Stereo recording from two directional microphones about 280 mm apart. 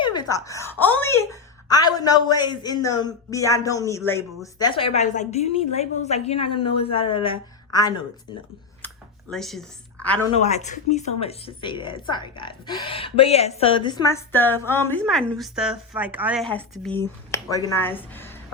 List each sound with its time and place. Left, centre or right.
0.0 s a woman's voice: centre
9.3 s a woman's voice: centre
10.3 s a woman's voice: left; by 18.3 s centre